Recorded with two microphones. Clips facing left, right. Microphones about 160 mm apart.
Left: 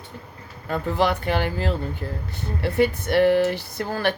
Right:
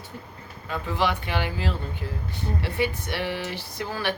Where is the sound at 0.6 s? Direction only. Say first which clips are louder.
Left 4 dB; 45° left (ahead or behind).